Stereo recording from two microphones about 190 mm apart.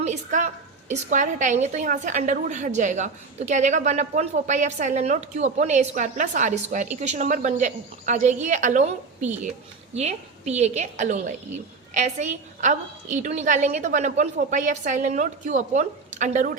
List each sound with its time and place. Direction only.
0.0 s a woman's voice: 40° right (ahead or behind)